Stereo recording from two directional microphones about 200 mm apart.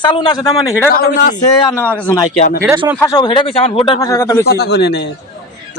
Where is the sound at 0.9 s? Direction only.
45° left (ahead or behind).